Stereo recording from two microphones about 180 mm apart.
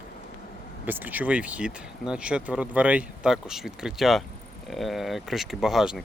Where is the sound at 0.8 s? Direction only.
10° right (ahead or behind).